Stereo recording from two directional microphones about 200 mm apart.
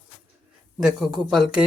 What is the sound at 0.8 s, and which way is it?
Speech, centre (ahead or behind).